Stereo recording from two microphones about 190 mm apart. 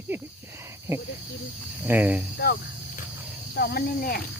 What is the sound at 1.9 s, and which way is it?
Speech, 10° right (ahead or behind).